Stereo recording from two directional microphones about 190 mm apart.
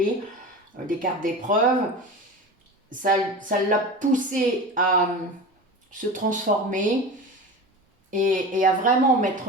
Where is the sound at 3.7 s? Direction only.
45° right (ahead or behind).